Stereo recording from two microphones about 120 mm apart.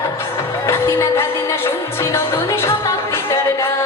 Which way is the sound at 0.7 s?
20° left (ahead or behind).